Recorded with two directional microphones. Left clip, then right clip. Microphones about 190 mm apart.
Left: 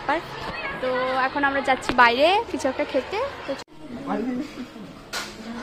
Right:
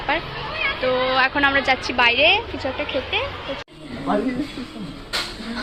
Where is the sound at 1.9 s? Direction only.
35° left (ahead or behind).